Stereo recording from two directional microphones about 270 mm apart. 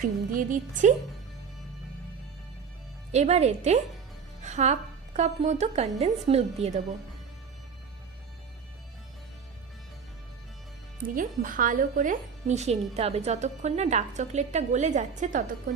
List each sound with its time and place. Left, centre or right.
0.0 s speech: right
3.1 s speech: right
11.0 s speech: right